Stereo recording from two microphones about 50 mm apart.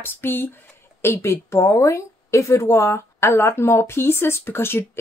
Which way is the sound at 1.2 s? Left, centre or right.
Left.